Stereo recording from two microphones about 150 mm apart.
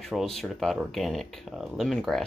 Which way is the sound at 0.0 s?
Centre (ahead or behind).